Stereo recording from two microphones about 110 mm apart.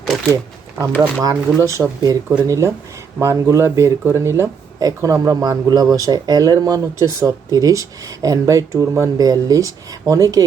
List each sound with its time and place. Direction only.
1.2 s speech: 30° right (ahead or behind)